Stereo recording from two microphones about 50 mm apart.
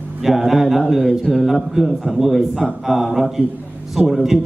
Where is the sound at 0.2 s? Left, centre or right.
Centre.